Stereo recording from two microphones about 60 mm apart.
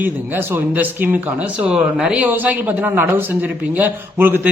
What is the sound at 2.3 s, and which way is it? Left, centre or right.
A man's voice, right.